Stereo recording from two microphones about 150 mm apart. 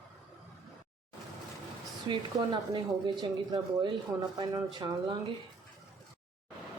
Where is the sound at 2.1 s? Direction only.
30° right (ahead or behind).